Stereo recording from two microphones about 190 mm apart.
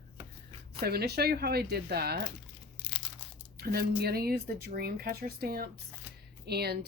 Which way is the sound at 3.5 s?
55° right (ahead or behind).